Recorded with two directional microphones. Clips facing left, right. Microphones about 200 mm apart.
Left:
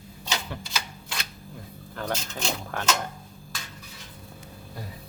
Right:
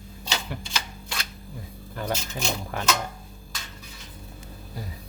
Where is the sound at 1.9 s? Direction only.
10° right (ahead or behind).